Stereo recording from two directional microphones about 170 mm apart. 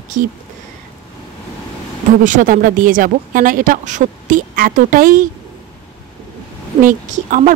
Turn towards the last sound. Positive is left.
turn(degrees=-50)  # may be behind; listen again after turning